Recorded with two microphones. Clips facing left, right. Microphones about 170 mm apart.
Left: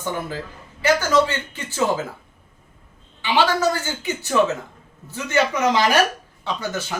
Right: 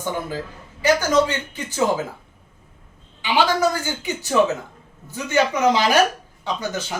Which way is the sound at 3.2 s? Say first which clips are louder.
Even; 15° right (ahead or behind).